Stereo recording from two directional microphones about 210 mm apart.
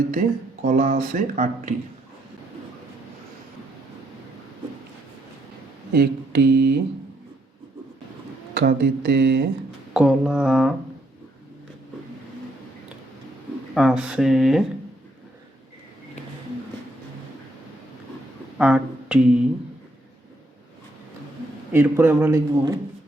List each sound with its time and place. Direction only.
0.1 s speech: 40° right (ahead or behind)
5.9 s a sound: 50° right (ahead or behind)
8.5 s a sound: 50° right (ahead or behind)
9.9 s mantra: 5° right (ahead or behind)
13.7 s mantra: 5° right (ahead or behind)
18.5 s speech: 5° right (ahead or behind)
21.7 s a man's voice: 10° right (ahead or behind)